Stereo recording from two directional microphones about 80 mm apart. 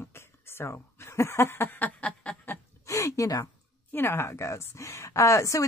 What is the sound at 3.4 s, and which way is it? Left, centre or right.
Speech, left.